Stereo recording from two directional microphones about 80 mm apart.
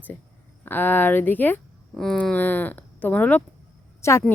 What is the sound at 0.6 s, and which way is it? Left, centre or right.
A woman's voice, left.